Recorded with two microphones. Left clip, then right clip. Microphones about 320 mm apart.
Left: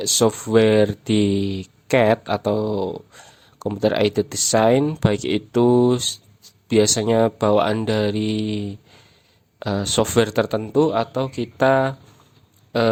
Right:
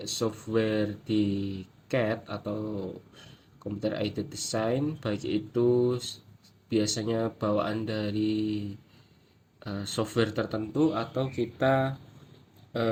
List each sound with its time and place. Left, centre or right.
0.0 s speech: left